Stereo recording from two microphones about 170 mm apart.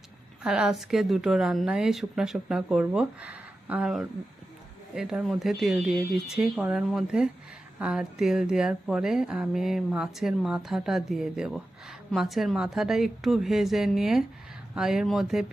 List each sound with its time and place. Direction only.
0.4 s speech: 5° right (ahead or behind)